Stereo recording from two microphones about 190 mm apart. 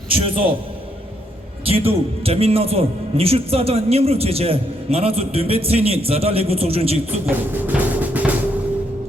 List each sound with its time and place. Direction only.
0.1 s a man's voice: 30° right (ahead or behind)
1.6 s a man's voice: 30° right (ahead or behind)
7.3 s music: 10° right (ahead or behind)